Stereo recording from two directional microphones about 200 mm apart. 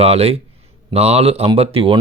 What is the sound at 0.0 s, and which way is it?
Speech, 30° right (ahead or behind).